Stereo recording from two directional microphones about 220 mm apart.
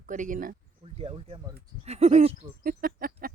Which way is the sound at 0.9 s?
25° right (ahead or behind).